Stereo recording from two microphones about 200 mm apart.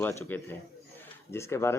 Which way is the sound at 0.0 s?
10° left (ahead or behind).